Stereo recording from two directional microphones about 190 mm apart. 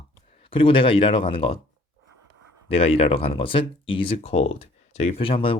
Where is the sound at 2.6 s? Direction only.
30° left (ahead or behind).